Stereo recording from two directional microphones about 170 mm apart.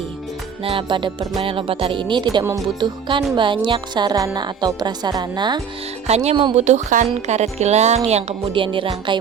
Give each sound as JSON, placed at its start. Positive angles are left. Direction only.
{"t": 0.6, "sound": "a woman's voice", "side_deg": -30}
{"t": 2.4, "sound": "speech", "side_deg": -15}
{"t": 3.3, "sound": "a woman's voice", "side_deg": -30}
{"t": 6.1, "sound": "speech", "side_deg": -40}